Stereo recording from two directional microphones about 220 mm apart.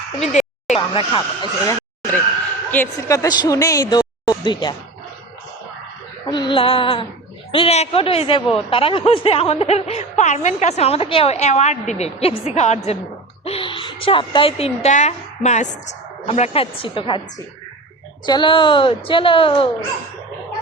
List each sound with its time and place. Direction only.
0.2 s speech: 30° left (ahead or behind)
2.6 s speech: 10° left (ahead or behind)
6.2 s a woman's voice: 20° left (ahead or behind)
18.3 s a woman's voice: 20° left (ahead or behind)